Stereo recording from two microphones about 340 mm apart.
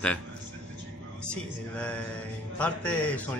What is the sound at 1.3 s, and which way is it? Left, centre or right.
A man's voice, centre.